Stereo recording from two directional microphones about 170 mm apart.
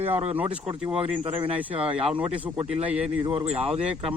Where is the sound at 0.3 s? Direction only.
10° right (ahead or behind).